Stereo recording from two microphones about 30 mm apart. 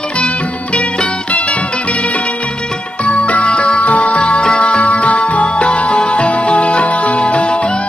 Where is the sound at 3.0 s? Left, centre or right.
Left.